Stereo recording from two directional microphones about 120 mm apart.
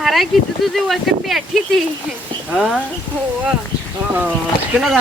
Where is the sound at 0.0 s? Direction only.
Centre (ahead or behind).